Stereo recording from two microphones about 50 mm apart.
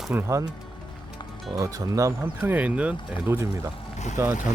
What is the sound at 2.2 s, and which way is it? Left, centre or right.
Speech, right.